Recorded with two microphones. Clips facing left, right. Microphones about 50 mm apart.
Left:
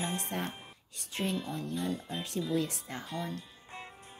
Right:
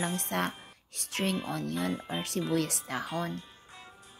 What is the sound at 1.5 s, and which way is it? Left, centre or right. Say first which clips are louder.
Speech: right 3 dB; right.